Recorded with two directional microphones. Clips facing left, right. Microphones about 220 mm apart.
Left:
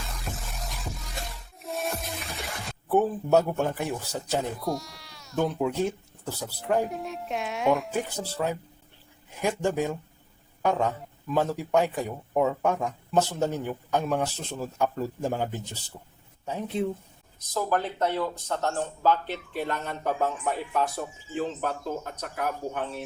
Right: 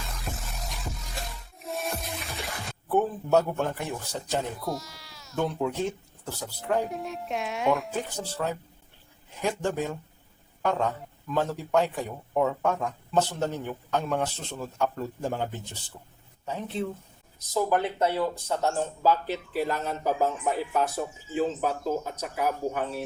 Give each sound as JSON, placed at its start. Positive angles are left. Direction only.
{"t": 0.1, "sound": "music", "side_deg": 0}
{"t": 2.9, "sound": "a man's voice", "side_deg": 10}
{"t": 17.5, "sound": "speech", "side_deg": -10}